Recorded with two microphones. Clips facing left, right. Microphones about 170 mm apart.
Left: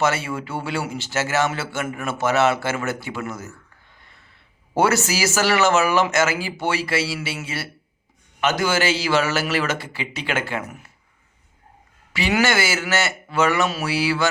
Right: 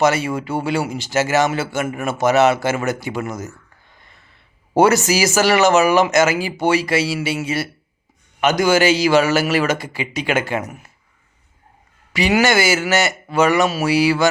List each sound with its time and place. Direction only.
0.0 s a man's voice: 15° right (ahead or behind)
4.8 s a man's voice: 15° right (ahead or behind)
12.1 s a man's voice: 15° right (ahead or behind)